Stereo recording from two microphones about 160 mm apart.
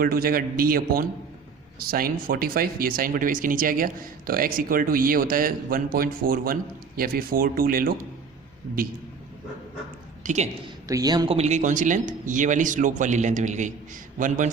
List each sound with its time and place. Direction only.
0.0 s speech: 65° right (ahead or behind)
10.2 s speech: 45° right (ahead or behind)
10.8 s a man's voice: 20° right (ahead or behind)
11.3 s speech: 45° right (ahead or behind)